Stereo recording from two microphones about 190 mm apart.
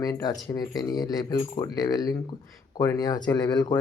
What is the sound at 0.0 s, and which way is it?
Speech, 20° left (ahead or behind).